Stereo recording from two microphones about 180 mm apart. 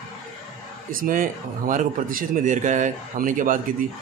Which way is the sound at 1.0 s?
50° right (ahead or behind).